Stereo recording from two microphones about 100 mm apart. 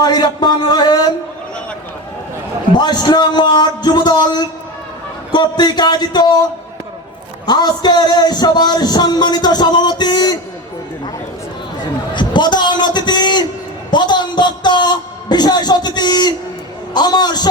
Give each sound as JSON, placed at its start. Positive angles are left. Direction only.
{"t": 0.0, "sound": "a man's voice", "side_deg": 45}
{"t": 2.7, "sound": "a man's voice", "side_deg": 45}
{"t": 7.4, "sound": "a man's voice", "side_deg": 45}
{"t": 12.1, "sound": "a sound", "side_deg": 50}
{"t": 13.9, "sound": "a man's voice", "side_deg": 50}